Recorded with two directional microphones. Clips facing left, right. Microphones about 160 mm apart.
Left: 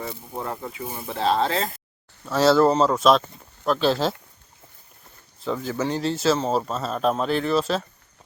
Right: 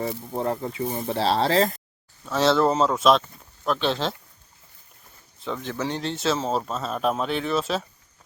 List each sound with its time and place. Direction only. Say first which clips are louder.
0.0 s speech: right 5 dB; 30° right (ahead or behind)
2.2 s speech: left 3 dB; centre (ahead or behind)
5.4 s speech: left 3 dB; centre (ahead or behind)